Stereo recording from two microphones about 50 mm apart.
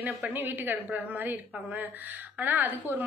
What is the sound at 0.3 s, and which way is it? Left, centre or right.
A woman's voice, right.